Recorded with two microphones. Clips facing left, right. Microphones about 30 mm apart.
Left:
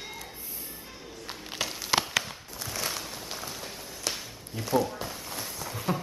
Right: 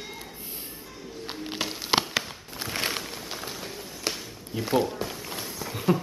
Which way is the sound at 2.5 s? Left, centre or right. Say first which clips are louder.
Right 5 dB; right.